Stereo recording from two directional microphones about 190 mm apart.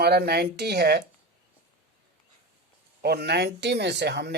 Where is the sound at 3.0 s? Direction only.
55° right (ahead or behind).